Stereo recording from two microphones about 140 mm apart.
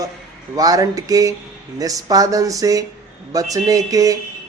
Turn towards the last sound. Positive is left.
turn(degrees=-25)  # may be behind; listen again after turning